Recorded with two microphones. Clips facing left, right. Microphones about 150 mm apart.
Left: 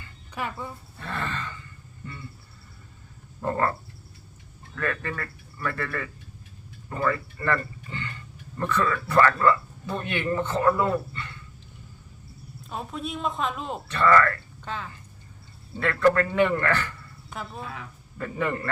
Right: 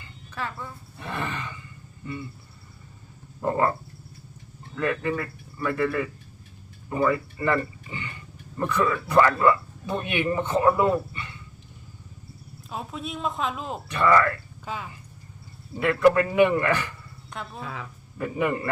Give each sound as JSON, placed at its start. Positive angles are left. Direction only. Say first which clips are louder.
{"t": 0.3, "sound": "speech", "louder": "left 1 dB", "side_deg": 15}
{"t": 0.9, "sound": "a sound", "louder": "right 1 dB", "side_deg": -15}
{"t": 3.4, "sound": "a man's voice", "louder": "right 2 dB", "side_deg": -15}
{"t": 12.7, "sound": "speech", "louder": "left 1 dB", "side_deg": 0}
{"t": 13.8, "sound": "a man's voice", "louder": "even", "side_deg": -15}
{"t": 17.3, "sound": "speech", "louder": "even", "side_deg": 5}
{"t": 18.2, "sound": "a man's voice", "louder": "right 3 dB", "side_deg": -15}